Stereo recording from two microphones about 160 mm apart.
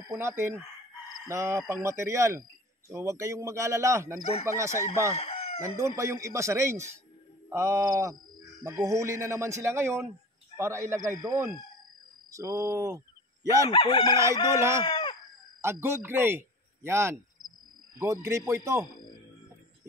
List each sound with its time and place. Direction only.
0.1 s speech: 15° right (ahead or behind)
5.1 s chicken: 40° left (ahead or behind)
5.6 s speech: 20° right (ahead or behind)
13.7 s chicken: 30° left (ahead or behind)
14.5 s speech: 15° right (ahead or behind)
14.8 s chicken: 30° left (ahead or behind)
15.6 s a man's voice: 15° right (ahead or behind)